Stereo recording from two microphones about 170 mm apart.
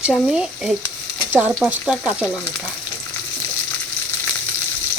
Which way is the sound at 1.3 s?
10° right (ahead or behind).